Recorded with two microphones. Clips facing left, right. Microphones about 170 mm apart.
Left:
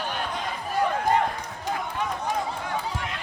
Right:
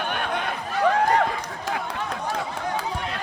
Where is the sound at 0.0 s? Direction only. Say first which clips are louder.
Right 3 dB; 65° right (ahead or behind); by 2.0 s 85° right.